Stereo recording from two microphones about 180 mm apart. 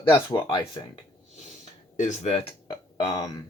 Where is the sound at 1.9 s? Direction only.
40° left (ahead or behind).